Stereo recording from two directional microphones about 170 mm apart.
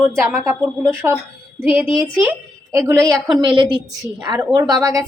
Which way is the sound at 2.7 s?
15° right (ahead or behind).